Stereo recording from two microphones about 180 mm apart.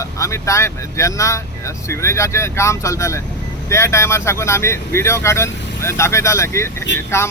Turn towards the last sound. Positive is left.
turn(degrees=15)  # may be behind; listen again after turning